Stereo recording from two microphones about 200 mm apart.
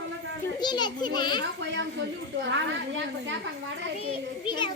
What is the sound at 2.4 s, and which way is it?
Speech, 65° right (ahead or behind).